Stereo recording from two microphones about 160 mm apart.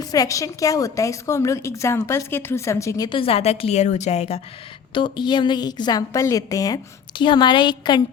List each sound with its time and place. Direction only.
0.0 s a woman's voice: 20° left (ahead or behind); by 4.4 s 45° left (ahead or behind)
4.9 s a woman's voice: 30° left (ahead or behind)